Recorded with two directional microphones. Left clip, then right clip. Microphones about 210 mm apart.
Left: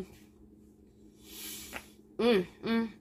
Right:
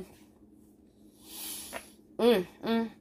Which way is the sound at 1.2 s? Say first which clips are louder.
Right 1 dB; 35° right (ahead or behind).